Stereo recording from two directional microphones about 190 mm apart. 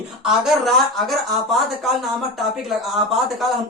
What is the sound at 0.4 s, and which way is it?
Speech, centre (ahead or behind).